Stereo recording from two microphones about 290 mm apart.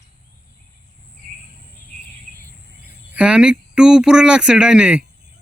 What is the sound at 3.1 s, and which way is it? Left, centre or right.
Speech, centre.